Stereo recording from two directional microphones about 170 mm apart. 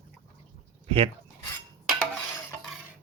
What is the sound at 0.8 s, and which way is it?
Speech, 30° right (ahead or behind).